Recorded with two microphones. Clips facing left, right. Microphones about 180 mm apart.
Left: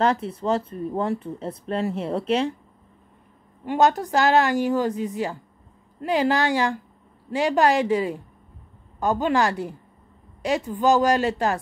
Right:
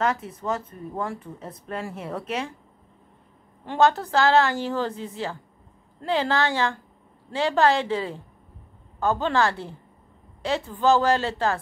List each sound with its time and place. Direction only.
0.0 s speech: 30° left (ahead or behind)
3.6 s a woman's voice: 15° left (ahead or behind)